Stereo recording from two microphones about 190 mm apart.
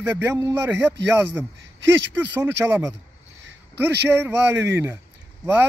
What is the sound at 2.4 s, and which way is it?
Speech, 10° right (ahead or behind).